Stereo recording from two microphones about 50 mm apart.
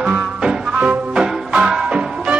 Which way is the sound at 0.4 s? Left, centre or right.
Right.